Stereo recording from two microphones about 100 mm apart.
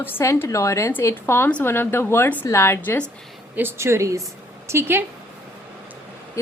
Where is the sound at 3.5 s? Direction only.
20° right (ahead or behind).